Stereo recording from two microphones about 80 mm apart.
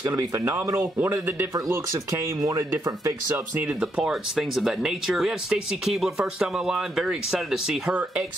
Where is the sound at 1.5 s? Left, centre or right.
Right.